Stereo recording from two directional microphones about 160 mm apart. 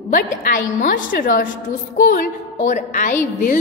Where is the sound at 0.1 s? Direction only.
60° left (ahead or behind).